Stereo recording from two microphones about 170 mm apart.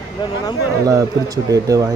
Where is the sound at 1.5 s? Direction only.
20° right (ahead or behind).